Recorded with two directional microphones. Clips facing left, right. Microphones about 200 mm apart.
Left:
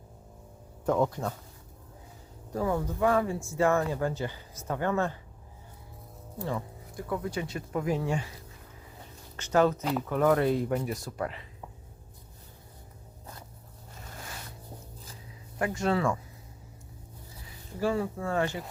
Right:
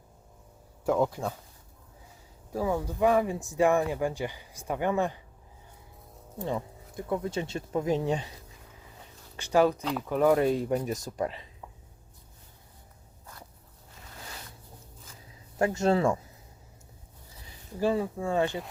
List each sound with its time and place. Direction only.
0.9 s speech: 5° right (ahead or behind)
2.5 s speech: 10° right (ahead or behind)
6.4 s speech: 20° right (ahead or behind)
9.3 s speech: 10° right (ahead or behind)
15.5 s speech: 25° right (ahead or behind)
17.7 s speech: 20° right (ahead or behind)